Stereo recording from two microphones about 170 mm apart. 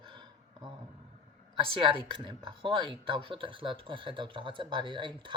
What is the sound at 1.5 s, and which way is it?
Speech, 30° right (ahead or behind).